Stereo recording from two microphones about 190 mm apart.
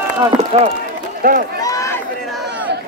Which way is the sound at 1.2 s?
50° right (ahead or behind).